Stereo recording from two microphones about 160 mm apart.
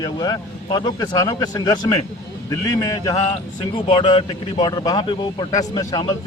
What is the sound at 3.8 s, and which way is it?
A man's voice, 40° left (ahead or behind).